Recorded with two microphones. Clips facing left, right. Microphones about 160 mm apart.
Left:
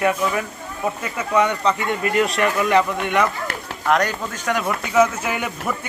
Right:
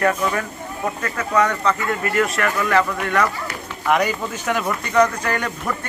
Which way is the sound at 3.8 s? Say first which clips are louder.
Even; 5° right (ahead or behind).